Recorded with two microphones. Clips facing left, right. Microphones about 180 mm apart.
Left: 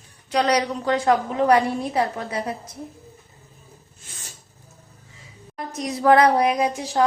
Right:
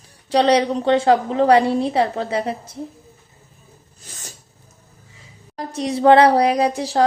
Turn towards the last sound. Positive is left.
turn(degrees=-35)  # may be behind; listen again after turning